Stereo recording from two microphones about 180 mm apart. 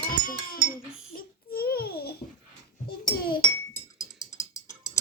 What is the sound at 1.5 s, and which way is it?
Babbling, 60° left (ahead or behind).